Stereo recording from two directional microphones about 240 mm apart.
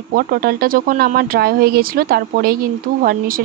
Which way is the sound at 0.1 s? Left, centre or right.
Right.